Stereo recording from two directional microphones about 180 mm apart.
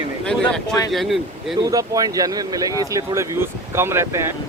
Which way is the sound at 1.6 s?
20° right (ahead or behind).